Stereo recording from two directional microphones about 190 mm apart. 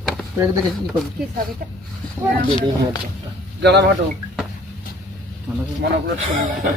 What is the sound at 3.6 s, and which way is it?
Speech, 60° right (ahead or behind).